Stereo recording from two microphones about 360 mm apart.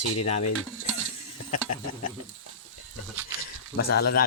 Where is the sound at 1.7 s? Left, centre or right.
Left.